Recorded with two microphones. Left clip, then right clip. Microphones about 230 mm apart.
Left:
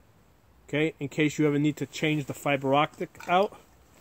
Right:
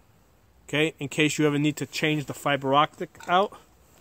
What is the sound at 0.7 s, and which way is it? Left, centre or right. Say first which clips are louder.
Speech: right 3 dB; right.